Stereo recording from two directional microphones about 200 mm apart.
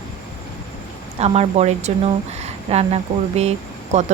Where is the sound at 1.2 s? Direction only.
30° right (ahead or behind).